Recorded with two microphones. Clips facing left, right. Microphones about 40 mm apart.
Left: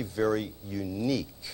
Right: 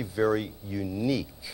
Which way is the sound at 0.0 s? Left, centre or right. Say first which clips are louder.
Right 2 dB; centre.